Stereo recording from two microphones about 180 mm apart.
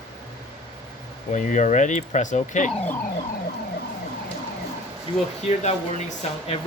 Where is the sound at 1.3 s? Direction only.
45° left (ahead or behind).